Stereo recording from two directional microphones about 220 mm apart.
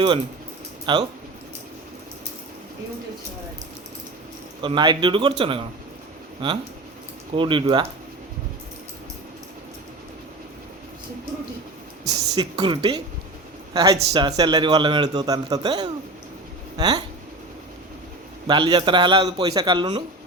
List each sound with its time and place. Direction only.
0.9 s a man's voice: 20° right (ahead or behind)
4.6 s a man's voice: 20° right (ahead or behind)
12.3 s a man's voice: 20° right (ahead or behind)
18.4 s a man's voice: 20° right (ahead or behind)